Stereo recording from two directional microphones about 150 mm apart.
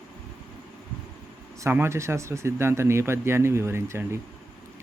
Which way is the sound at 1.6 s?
15° right (ahead or behind).